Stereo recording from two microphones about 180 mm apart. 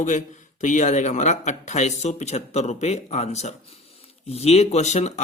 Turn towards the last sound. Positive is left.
turn(degrees=40)  # may be behind; listen again after turning